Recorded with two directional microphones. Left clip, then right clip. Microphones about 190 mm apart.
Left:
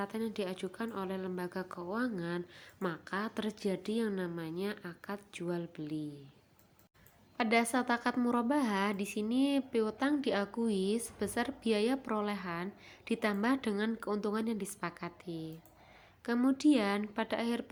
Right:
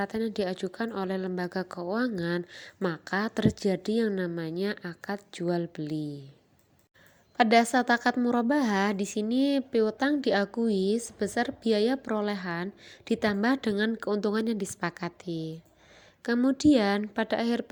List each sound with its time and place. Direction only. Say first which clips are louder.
0.0 s a woman's voice: right 7 dB; 30° right (ahead or behind)
7.3 s a woman's voice: right 9 dB; 30° right (ahead or behind)